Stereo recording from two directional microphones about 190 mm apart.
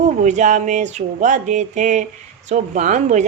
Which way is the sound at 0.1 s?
40° right (ahead or behind).